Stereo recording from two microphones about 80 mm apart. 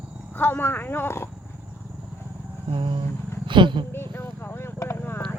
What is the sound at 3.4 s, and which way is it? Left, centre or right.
Roaring cats, right.